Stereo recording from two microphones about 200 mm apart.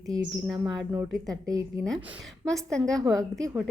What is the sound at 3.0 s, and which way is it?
Speech, 15° right (ahead or behind).